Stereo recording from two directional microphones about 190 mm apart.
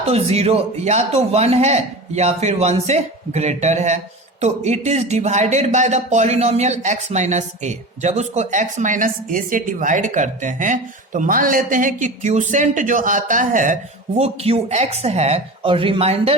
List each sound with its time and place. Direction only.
0.0 s speech: 35° right (ahead or behind)
14.2 s speech: 30° right (ahead or behind)